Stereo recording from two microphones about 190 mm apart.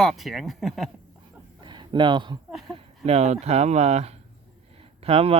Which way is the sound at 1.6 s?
25° right (ahead or behind).